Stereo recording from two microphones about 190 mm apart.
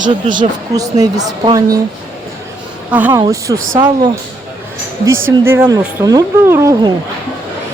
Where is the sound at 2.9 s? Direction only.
10° right (ahead or behind).